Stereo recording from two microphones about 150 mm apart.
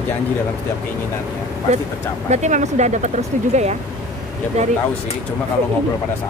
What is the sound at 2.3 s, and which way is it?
Speech, 50° right (ahead or behind).